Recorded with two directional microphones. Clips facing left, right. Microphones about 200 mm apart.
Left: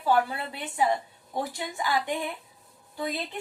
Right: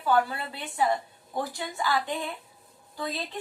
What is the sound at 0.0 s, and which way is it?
A woman's voice, 20° left (ahead or behind).